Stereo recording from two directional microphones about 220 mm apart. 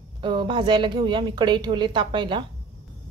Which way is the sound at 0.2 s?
20° right (ahead or behind).